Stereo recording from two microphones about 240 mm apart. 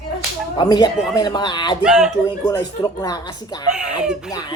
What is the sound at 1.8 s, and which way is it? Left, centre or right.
Speech, centre.